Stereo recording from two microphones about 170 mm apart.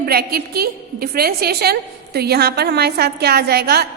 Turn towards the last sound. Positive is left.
turn(degrees=-70)  # may be behind; listen again after turning